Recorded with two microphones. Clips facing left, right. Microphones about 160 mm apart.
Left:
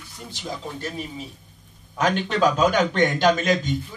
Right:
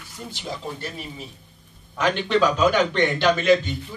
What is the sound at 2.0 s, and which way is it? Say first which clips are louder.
Speech: right 1 dB; 45° left (ahead or behind).